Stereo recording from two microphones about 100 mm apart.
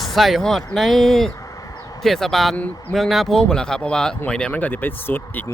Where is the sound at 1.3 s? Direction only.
35° left (ahead or behind).